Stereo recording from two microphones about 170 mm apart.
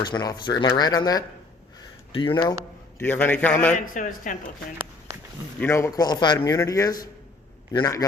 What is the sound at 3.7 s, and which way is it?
Speech, 50° left (ahead or behind).